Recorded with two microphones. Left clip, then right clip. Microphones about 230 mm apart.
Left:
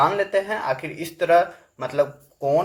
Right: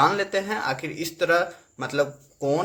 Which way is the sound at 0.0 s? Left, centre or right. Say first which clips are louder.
Left 2 dB; right.